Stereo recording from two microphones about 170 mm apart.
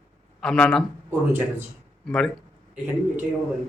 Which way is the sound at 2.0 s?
5° left (ahead or behind).